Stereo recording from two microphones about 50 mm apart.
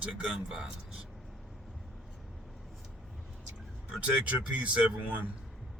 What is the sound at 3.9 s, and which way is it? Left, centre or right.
Speech, right.